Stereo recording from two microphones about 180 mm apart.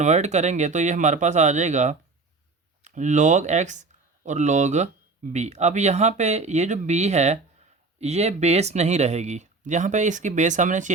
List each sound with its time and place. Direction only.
0.0 s speech: 40° right (ahead or behind)